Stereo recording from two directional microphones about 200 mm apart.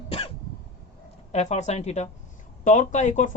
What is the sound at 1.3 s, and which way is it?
Speech, 35° left (ahead or behind).